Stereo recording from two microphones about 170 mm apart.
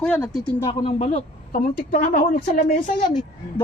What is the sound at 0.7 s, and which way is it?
Speech, 35° left (ahead or behind).